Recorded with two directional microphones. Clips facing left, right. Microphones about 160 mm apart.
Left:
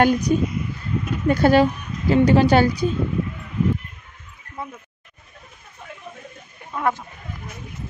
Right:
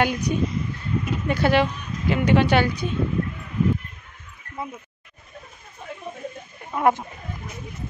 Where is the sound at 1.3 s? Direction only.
40° left (ahead or behind).